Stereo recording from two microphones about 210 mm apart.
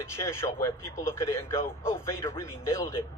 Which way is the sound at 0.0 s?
10° left (ahead or behind).